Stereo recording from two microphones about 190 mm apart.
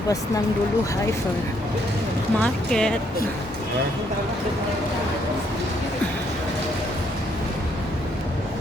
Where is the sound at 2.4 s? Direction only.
5° left (ahead or behind).